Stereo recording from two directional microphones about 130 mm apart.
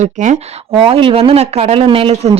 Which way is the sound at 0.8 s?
45° right (ahead or behind).